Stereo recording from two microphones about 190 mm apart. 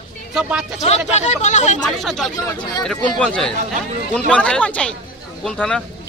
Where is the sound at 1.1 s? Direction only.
40° left (ahead or behind).